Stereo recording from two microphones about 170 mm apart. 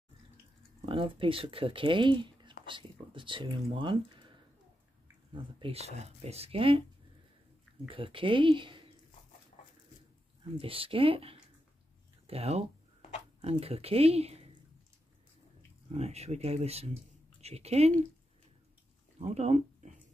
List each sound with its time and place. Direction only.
0.8 s speech: 30° right (ahead or behind)
5.3 s speech: 30° right (ahead or behind)
7.9 s speech: 30° right (ahead or behind)
10.6 s speech: 35° right (ahead or behind)
15.9 s speech: 40° right (ahead or behind)
19.1 s speech: 40° right (ahead or behind)